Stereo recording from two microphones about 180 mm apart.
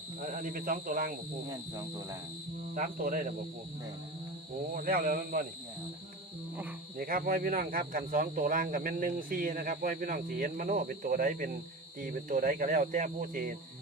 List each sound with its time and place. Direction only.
0.2 s speech: 50° right (ahead or behind)
1.5 s speech: 20° right (ahead or behind)
2.7 s speech: 50° right (ahead or behind)
4.7 s speech: 50° right (ahead or behind)
6.9 s speech: 55° right (ahead or behind)